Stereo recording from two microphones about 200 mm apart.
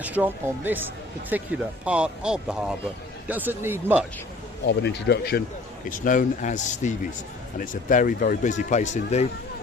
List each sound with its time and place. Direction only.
0.0 s speech: 10° right (ahead or behind)
4.6 s speech: 60° left (ahead or behind)
5.9 s speech: 40° left (ahead or behind)